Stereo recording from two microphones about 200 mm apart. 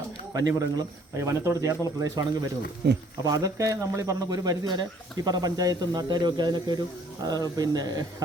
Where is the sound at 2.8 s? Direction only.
60° right (ahead or behind).